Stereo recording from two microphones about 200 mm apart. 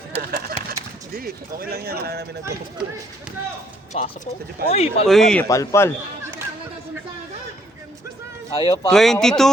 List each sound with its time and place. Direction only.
0.2 s a sound: 50° right (ahead or behind)
0.7 s speech: 45° right (ahead or behind)
2.4 s speech: 15° right (ahead or behind)
3.9 s speech: 35° left (ahead or behind)
5.0 s speech: centre (ahead or behind)
5.5 s a man's voice: 15° left (ahead or behind)
8.5 s speech: 20° left (ahead or behind)
8.9 s speech: centre (ahead or behind)